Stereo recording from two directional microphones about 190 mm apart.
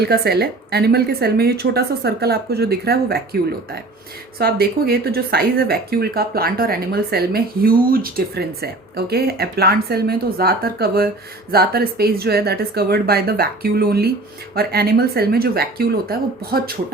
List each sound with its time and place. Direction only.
0.0 s speech: 60° right (ahead or behind)
4.4 s speech: 55° right (ahead or behind)